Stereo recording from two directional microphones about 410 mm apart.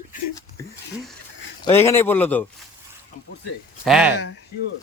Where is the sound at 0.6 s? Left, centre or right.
Centre.